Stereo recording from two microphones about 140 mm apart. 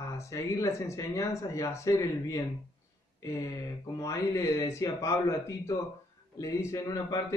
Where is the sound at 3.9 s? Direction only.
20° left (ahead or behind).